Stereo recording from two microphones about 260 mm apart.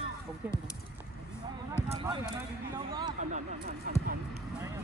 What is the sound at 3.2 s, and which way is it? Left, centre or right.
Speech, right.